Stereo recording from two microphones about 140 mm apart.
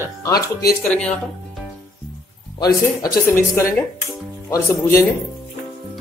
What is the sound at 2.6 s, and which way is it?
A man's voice, 30° left (ahead or behind).